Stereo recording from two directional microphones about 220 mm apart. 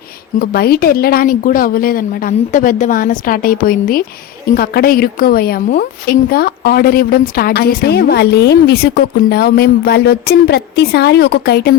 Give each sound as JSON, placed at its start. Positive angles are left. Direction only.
{"t": 0.3, "sound": "a woman's voice", "side_deg": 45}